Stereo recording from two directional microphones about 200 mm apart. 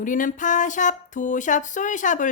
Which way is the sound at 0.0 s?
40° left (ahead or behind).